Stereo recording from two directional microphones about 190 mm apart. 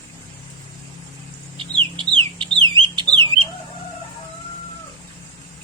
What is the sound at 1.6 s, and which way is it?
Chicken, 25° right (ahead or behind).